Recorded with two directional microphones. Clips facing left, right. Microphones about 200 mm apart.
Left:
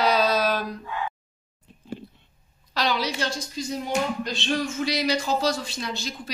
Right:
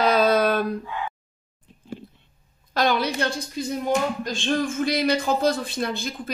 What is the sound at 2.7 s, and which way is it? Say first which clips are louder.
A woman's voice: right 4 dB; 50° right (ahead or behind).